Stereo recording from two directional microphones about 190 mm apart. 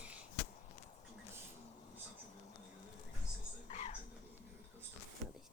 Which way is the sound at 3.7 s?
40° left (ahead or behind).